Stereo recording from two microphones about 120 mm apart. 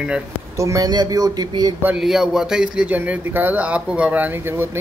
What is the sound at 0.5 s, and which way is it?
Speech, 25° right (ahead or behind).